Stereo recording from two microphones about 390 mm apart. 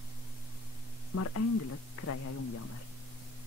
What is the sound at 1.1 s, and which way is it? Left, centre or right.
Speech, left.